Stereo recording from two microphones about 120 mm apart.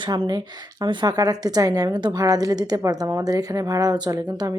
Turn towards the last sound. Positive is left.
turn(degrees=-35)  # may be behind; listen again after turning